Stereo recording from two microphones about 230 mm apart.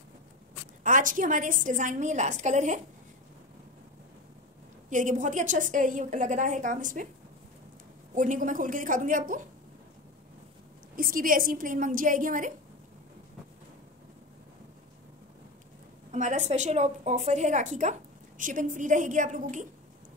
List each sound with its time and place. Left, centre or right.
0.8 s a woman's voice: right
4.8 s a woman's voice: right
8.2 s a woman's voice: right
11.0 s a woman's voice: right
16.1 s a woman's voice: right